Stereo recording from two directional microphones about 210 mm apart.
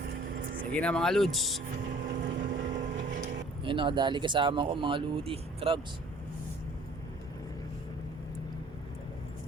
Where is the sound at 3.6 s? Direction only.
25° right (ahead or behind).